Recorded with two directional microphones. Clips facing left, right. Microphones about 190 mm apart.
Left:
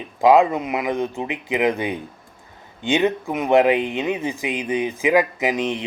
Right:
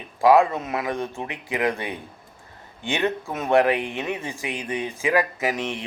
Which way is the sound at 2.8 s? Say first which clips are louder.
Left 5 dB; 20° left (ahead or behind).